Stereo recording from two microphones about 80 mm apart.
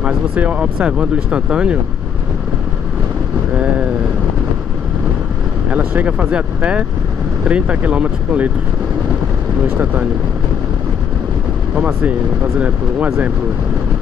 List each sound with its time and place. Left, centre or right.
0.0 s speech: centre
3.5 s vehicle: centre
5.7 s speech: centre
9.7 s speech: centre
11.7 s speech: centre